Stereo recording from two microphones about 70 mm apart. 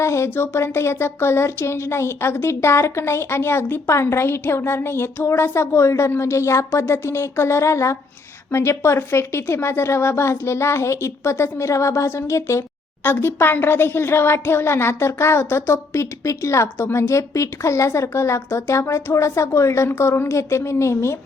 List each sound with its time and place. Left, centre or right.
0.0 s speech: left
13.1 s a woman's voice: left